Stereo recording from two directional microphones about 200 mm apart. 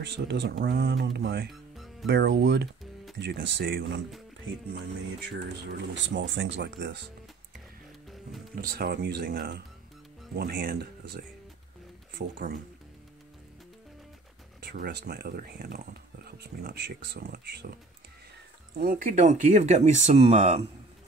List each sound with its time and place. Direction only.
0.3 s speech: 55° right (ahead or behind)
1.5 s music: centre (ahead or behind)
2.0 s speech: 60° right (ahead or behind)
5.7 s speech: 65° right (ahead or behind)
8.5 s speech: 50° right (ahead or behind)
14.6 s speech: 50° right (ahead or behind)
18.8 s speech: 45° right (ahead or behind)